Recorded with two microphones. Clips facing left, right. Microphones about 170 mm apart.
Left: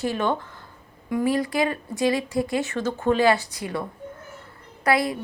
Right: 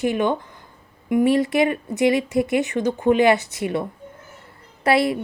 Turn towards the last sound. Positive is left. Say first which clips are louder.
# right 4 dB
turn(degrees=-25)  # may be behind; listen again after turning